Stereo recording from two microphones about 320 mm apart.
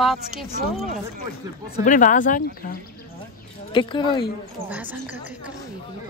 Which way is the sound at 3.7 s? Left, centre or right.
Centre.